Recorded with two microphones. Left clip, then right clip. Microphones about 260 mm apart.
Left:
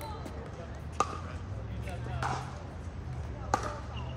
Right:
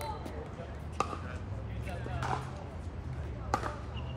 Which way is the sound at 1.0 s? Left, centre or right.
Left.